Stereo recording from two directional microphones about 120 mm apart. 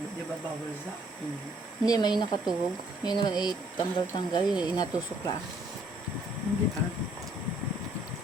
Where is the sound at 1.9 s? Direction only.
40° left (ahead or behind).